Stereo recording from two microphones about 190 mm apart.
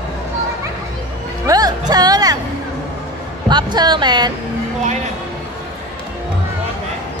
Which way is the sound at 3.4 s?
20° right (ahead or behind).